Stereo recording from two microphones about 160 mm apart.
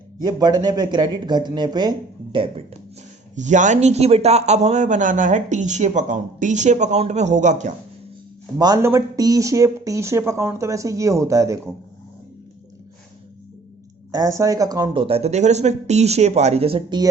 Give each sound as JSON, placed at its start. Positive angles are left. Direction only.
{"t": 0.2, "sound": "speech", "side_deg": -25}
{"t": 3.3, "sound": "a man's voice", "side_deg": -50}
{"t": 8.5, "sound": "speech", "side_deg": -25}
{"t": 14.1, "sound": "speech", "side_deg": -20}
{"t": 15.0, "sound": "a man's voice", "side_deg": -40}